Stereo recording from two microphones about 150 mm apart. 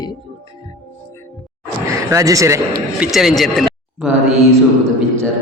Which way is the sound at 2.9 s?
5° right (ahead or behind).